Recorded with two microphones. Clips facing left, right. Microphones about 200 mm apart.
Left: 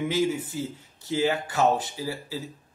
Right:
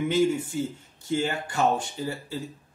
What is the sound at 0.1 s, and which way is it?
Speech, 5° left (ahead or behind).